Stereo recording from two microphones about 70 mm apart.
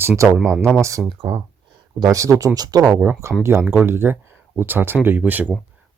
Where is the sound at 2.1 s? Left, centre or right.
Right.